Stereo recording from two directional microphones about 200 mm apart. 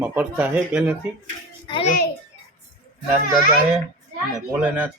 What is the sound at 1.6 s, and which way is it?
Speech, 25° left (ahead or behind).